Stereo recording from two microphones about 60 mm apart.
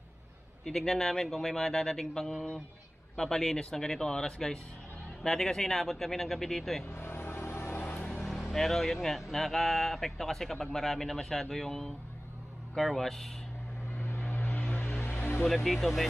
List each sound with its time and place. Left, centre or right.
0.7 s speech: centre
6.8 s vehicle: left
7.8 s vehicle: left
8.1 s speech: centre
13.9 s vehicle: left
14.8 s music: left
15.4 s speech: centre